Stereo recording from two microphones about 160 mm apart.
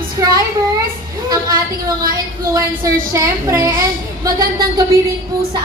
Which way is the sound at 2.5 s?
20° right (ahead or behind).